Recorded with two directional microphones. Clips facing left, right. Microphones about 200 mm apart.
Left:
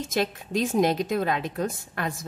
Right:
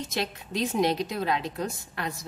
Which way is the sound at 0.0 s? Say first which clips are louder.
Left 5 dB; 45° left (ahead or behind).